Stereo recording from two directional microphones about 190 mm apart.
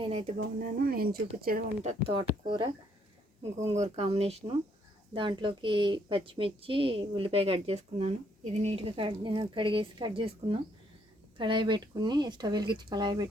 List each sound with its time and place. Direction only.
0.0 s a woman's voice: 30° right (ahead or behind)
0.3 s speech: 50° right (ahead or behind)
2.1 s a woman's voice: 25° right (ahead or behind)
3.7 s a woman's voice: 35° right (ahead or behind)